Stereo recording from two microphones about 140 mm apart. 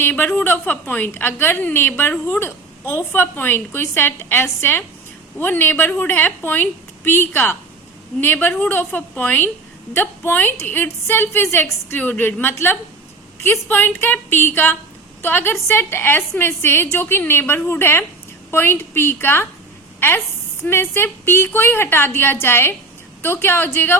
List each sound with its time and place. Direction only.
0.0 s a woman's voice: 15° left (ahead or behind)